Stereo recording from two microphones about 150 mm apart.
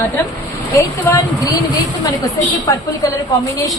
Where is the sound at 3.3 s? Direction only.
20° left (ahead or behind).